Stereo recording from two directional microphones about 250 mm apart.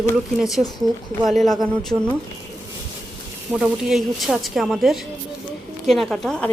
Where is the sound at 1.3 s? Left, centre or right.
Centre.